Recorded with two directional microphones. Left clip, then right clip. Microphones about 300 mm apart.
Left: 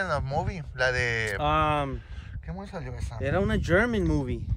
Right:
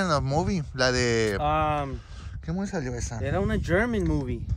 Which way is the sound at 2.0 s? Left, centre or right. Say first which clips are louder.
Right 1 dB; right.